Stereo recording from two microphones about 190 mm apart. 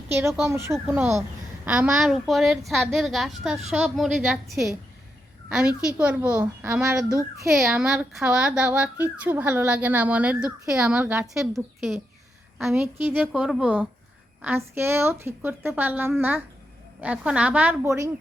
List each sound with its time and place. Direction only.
0.1 s a woman's voice: 10° right (ahead or behind)